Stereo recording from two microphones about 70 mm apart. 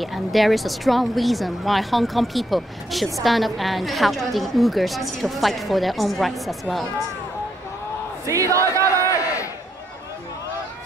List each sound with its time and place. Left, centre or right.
0.0 s speech: centre
8.3 s speech: right
9.1 s crowd: left